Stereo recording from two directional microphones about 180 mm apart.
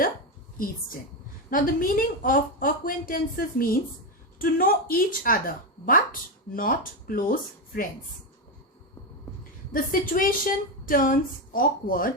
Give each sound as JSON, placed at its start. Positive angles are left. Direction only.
{"t": 1.5, "sound": "speech", "side_deg": 50}
{"t": 9.7, "sound": "speech", "side_deg": 50}